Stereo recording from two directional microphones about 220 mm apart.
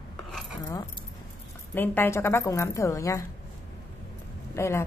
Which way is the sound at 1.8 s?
10° left (ahead or behind).